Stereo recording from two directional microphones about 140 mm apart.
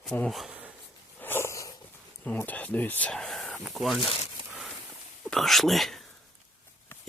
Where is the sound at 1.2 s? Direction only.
15° left (ahead or behind).